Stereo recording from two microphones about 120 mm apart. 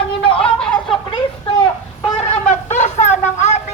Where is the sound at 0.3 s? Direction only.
5° left (ahead or behind).